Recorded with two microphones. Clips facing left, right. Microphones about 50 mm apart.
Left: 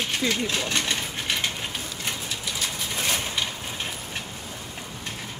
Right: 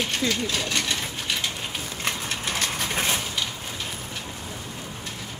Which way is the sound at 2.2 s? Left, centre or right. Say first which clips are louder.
Right 3 dB; right.